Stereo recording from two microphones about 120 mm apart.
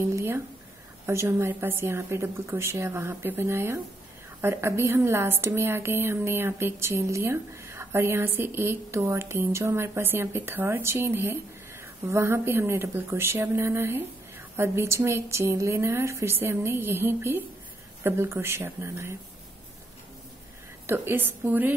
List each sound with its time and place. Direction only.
0.1 s a sound: 20° right (ahead or behind)
1.0 s a woman's voice: 20° right (ahead or behind)
20.8 s a woman's voice: 20° right (ahead or behind)